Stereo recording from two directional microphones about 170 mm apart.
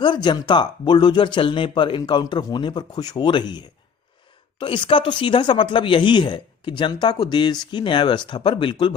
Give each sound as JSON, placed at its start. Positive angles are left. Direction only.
{"t": 0.0, "sound": "speech", "side_deg": 25}